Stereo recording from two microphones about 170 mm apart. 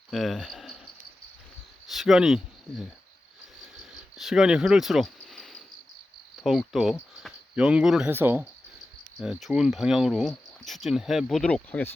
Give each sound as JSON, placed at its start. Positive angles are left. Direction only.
{"t": 0.1, "sound": "cricket", "side_deg": 0}
{"t": 1.9, "sound": "speech", "side_deg": 0}
{"t": 3.8, "sound": "cricket", "side_deg": 0}
{"t": 6.4, "sound": "speech", "side_deg": 0}
{"t": 9.1, "sound": "speech", "side_deg": 0}